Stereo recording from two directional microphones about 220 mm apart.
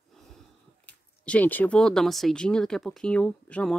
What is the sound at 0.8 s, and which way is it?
Speech, 5° left (ahead or behind).